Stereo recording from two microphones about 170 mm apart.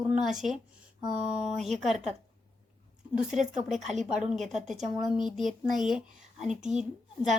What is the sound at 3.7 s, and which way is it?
Speech, 45° right (ahead or behind).